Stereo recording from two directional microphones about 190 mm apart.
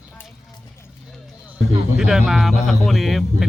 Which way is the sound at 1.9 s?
5° right (ahead or behind).